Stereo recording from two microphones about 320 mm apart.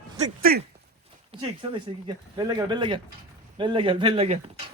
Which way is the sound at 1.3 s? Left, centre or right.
Centre.